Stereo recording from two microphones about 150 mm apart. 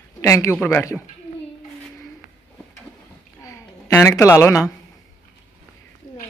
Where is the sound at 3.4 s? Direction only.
20° left (ahead or behind).